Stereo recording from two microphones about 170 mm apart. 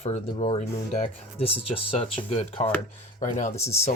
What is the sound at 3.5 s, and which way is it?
Speech, 15° left (ahead or behind).